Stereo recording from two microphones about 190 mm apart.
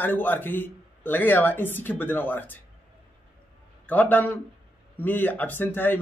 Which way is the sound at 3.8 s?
10° left (ahead or behind).